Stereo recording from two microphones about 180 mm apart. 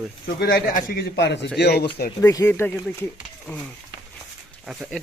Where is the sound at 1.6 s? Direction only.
65° left (ahead or behind).